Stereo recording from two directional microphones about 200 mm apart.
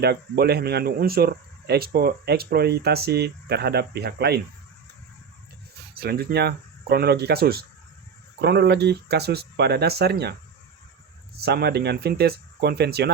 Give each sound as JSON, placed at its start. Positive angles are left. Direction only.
{"t": 0.0, "sound": "speech", "side_deg": -55}
{"t": 6.0, "sound": "speech", "side_deg": -50}
{"t": 11.3, "sound": "speech", "side_deg": -55}